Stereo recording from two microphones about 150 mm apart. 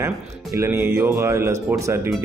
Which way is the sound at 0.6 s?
15° right (ahead or behind).